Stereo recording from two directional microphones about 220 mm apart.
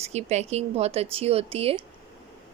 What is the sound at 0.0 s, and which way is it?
A woman's voice, 30° right (ahead or behind).